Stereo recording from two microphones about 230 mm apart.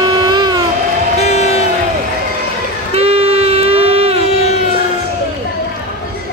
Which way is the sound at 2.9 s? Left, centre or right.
Right.